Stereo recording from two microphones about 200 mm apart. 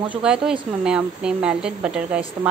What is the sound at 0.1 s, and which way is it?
A woman's voice, 5° right (ahead or behind).